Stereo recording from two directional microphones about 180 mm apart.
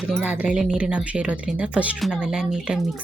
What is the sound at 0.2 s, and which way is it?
Speech, 10° right (ahead or behind).